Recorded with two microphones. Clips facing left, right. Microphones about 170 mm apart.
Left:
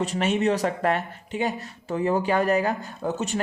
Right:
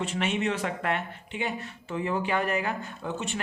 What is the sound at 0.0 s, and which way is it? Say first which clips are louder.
Speech: left 5 dB; 40° left (ahead or behind).